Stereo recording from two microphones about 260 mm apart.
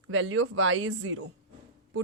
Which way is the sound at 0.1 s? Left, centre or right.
Right.